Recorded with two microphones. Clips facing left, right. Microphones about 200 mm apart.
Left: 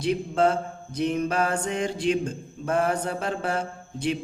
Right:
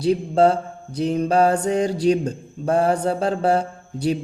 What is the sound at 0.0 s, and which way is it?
Mantra, 35° right (ahead or behind).